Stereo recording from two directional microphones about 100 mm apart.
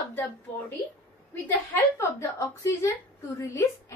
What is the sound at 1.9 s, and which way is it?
A woman's voice, 30° left (ahead or behind).